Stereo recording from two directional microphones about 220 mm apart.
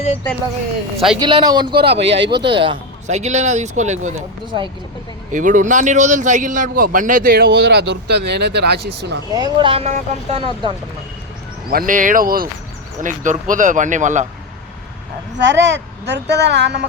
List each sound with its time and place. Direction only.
0.9 s speech: centre (ahead or behind)
1.2 s speech: 20° right (ahead or behind)
2.1 s speech: 55° right (ahead or behind)
2.5 s a man's voice: 25° right (ahead or behind)
5.3 s a man's voice: 35° right (ahead or behind)
9.3 s speech: 20° right (ahead or behind)
11.7 s a man's voice: 40° right (ahead or behind)
15.4 s speech: 55° right (ahead or behind)